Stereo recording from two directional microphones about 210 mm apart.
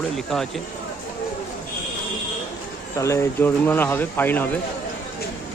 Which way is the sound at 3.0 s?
10° left (ahead or behind).